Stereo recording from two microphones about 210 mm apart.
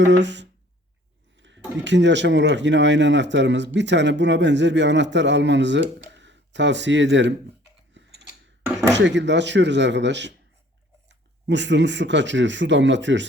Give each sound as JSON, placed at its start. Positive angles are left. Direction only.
{"t": 0.0, "sound": "speech", "side_deg": -55}
{"t": 8.0, "sound": "a sound", "side_deg": -60}
{"t": 8.9, "sound": "speech", "side_deg": -55}